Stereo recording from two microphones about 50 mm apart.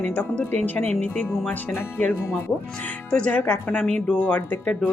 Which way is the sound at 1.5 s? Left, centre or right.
Left.